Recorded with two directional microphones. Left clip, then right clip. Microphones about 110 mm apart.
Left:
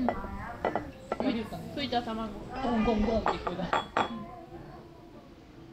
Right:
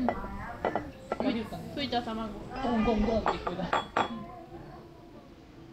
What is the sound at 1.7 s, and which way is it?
Speech, 30° right (ahead or behind).